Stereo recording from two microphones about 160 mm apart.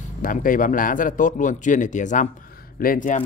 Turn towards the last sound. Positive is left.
turn(degrees=55)  # may be behind; listen again after turning